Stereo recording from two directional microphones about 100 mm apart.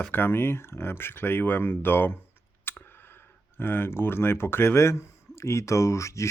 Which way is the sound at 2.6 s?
20° left (ahead or behind).